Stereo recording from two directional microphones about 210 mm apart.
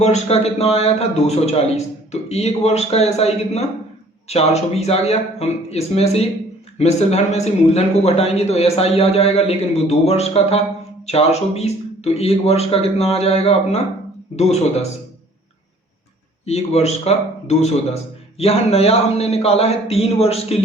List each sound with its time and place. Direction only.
0.0 s a man's voice: 30° left (ahead or behind)
16.5 s a man's voice: 30° left (ahead or behind)